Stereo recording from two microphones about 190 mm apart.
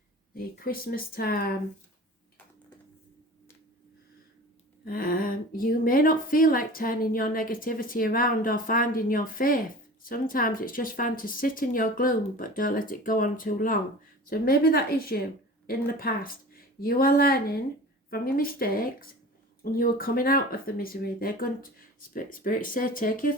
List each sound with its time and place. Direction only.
0.3 s speech: 50° left (ahead or behind)
4.9 s speech: 50° left (ahead or behind)